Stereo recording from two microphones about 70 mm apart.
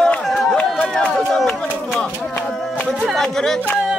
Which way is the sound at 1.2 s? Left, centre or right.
Centre.